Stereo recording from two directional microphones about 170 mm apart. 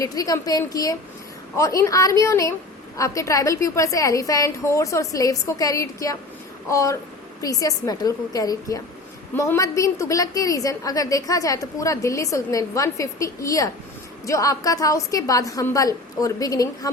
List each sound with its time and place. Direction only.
0.0 s a woman's voice: 20° left (ahead or behind)